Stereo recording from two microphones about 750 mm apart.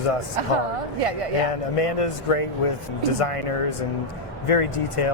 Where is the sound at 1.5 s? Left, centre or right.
Left.